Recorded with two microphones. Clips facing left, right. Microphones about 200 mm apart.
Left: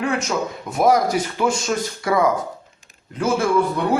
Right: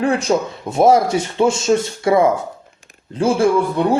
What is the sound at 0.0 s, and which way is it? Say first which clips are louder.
A man's voice: right 5 dB; 30° right (ahead or behind).